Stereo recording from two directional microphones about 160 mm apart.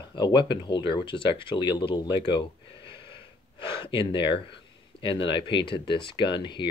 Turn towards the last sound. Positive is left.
turn(degrees=30)  # may be behind; listen again after turning